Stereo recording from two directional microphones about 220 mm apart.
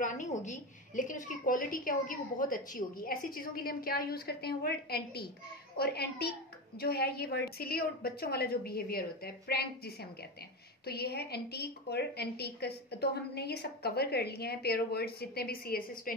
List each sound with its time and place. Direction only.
0.0 s a woman's voice: 35° left (ahead or behind)